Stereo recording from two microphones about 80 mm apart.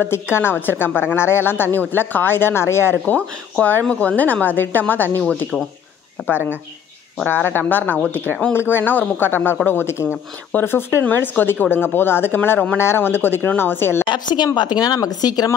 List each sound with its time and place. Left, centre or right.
0.0 s a woman's voice: left
3.2 s a woman's voice: centre
7.2 s a woman's voice: left
14.0 s speech: left